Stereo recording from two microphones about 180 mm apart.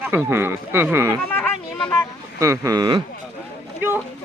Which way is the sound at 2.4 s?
20° right (ahead or behind).